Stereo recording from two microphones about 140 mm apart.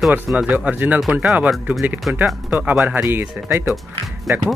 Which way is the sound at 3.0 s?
15° right (ahead or behind).